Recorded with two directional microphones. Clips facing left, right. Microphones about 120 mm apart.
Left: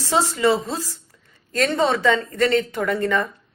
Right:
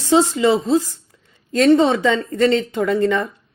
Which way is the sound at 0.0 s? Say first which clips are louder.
Right 4 dB; 20° right (ahead or behind).